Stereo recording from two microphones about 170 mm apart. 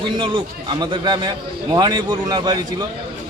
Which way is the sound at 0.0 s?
30° right (ahead or behind).